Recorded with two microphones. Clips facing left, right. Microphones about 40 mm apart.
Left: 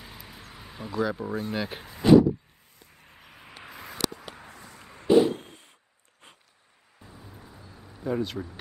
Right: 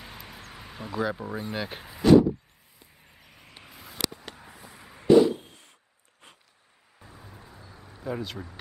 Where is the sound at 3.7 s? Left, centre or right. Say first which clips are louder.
Left 2 dB; centre.